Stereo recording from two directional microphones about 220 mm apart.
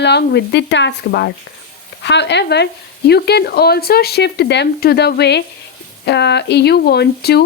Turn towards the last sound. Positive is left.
turn(degrees=45)  # may be behind; listen again after turning